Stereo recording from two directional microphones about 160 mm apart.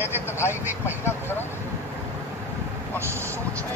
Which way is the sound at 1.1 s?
15° left (ahead or behind).